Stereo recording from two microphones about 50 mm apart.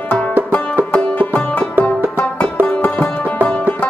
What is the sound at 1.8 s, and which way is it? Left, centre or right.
Music, right.